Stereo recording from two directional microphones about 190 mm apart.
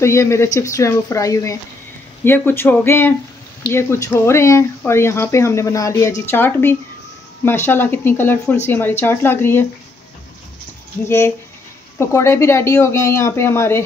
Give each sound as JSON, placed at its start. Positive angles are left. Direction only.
{"t": 0.0, "sound": "speech", "side_deg": 15}
{"t": 11.1, "sound": "speech", "side_deg": 15}